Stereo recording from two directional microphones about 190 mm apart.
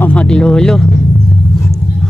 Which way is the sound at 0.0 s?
5° left (ahead or behind).